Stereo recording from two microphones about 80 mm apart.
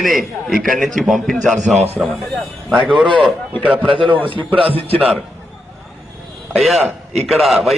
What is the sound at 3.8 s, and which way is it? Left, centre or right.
Speech, right.